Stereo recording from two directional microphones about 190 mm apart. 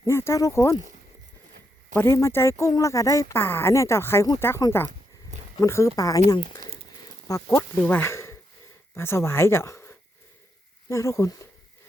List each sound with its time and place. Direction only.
0.0 s a woman's voice: 15° left (ahead or behind)
1.9 s a woman's voice: 15° left (ahead or behind)
7.3 s a woman's voice: 15° left (ahead or behind)